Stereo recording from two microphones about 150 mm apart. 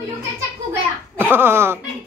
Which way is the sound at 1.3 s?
15° right (ahead or behind).